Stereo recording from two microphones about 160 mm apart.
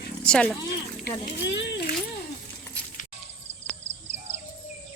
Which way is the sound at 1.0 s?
90° left.